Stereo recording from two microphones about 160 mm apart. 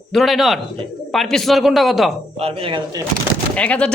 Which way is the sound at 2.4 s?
35° right (ahead or behind).